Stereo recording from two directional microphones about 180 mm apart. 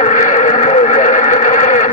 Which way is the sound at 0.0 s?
45° left (ahead or behind).